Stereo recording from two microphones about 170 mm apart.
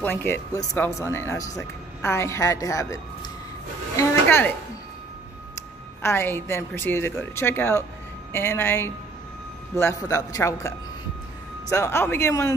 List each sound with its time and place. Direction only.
0.0 s a woman's voice: 10° left (ahead or behind)
3.9 s a sound: 15° left (ahead or behind)
6.0 s a woman's voice: 15° left (ahead or behind)
11.7 s a woman's voice: 15° left (ahead or behind)